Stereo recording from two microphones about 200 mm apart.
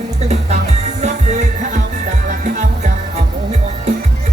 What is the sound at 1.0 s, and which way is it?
Music, 35° right (ahead or behind).